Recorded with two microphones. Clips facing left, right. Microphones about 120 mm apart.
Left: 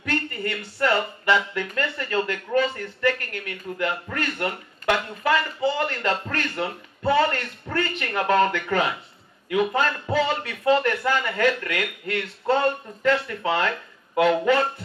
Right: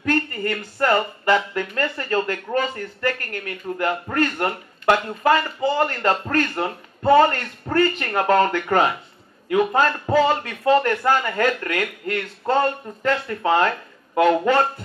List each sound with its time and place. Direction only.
0.0 s speech: 45° right (ahead or behind)